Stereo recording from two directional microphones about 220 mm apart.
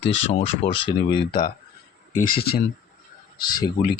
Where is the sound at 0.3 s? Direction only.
25° left (ahead or behind).